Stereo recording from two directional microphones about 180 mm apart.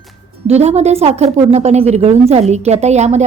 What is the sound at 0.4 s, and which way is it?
A woman's voice, 35° right (ahead or behind).